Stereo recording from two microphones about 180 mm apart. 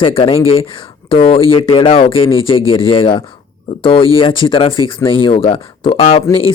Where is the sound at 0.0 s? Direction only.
30° left (ahead or behind).